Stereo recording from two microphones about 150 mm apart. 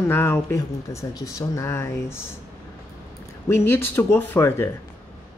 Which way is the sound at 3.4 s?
15° left (ahead or behind).